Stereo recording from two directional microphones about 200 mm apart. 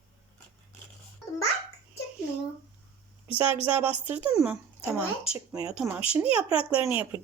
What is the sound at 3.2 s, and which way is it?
Speech, 25° left (ahead or behind).